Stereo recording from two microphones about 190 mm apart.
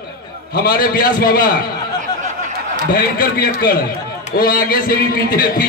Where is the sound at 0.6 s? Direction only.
50° left (ahead or behind).